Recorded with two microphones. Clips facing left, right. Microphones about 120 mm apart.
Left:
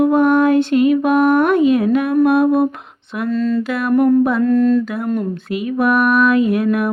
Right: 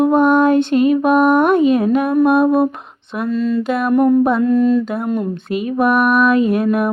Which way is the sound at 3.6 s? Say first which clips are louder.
Right 3 dB; 20° right (ahead or behind).